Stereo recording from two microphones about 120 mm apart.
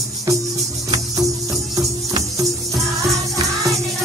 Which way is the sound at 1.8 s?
25° right (ahead or behind).